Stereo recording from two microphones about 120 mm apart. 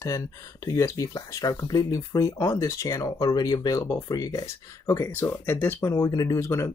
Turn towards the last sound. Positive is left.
turn(degrees=25)  # may be behind; listen again after turning